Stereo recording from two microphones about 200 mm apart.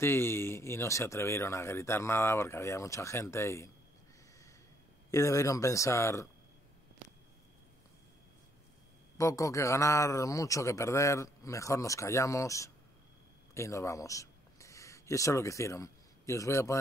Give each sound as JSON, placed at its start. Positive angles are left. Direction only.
{"t": 0.0, "sound": "speech", "side_deg": 10}
{"t": 5.1, "sound": "speech", "side_deg": 15}
{"t": 9.2, "sound": "speech", "side_deg": 15}